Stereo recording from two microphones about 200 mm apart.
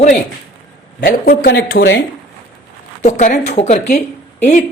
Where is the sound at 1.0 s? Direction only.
50° left (ahead or behind).